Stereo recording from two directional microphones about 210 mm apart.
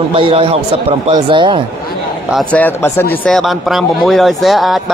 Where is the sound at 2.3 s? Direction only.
5° left (ahead or behind).